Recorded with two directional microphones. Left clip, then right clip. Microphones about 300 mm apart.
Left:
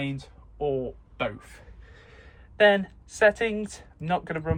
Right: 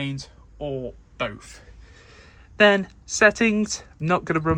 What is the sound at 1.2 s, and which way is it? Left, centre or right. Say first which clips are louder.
Speech: right 2 dB; centre.